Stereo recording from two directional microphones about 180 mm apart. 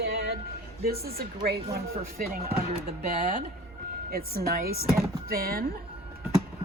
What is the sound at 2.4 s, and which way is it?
Speech, 35° right (ahead or behind).